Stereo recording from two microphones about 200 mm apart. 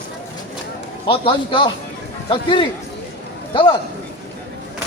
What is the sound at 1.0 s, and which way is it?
A man's voice, 25° left (ahead or behind).